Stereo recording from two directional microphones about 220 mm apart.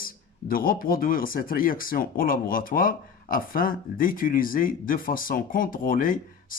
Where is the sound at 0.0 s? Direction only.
40° left (ahead or behind).